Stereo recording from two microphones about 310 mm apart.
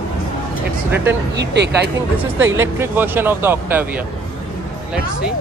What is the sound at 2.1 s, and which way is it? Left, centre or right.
Speech, centre.